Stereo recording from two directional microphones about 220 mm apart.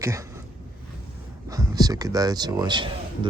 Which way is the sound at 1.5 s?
15° right (ahead or behind).